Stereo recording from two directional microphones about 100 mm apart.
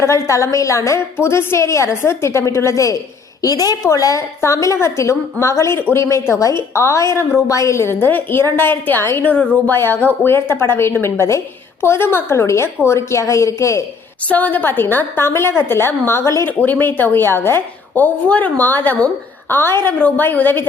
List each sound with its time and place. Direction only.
0.0 s a woman's voice: 30° left (ahead or behind)
14.3 s a woman's voice: 15° left (ahead or behind)